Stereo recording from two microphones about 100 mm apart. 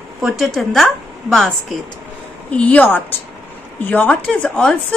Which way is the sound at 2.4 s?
15° left (ahead or behind).